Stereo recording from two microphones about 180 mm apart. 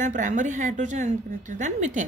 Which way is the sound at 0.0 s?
45° right (ahead or behind).